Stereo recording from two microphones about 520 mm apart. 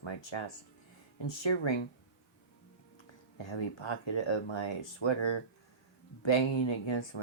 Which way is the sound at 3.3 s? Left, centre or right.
Left.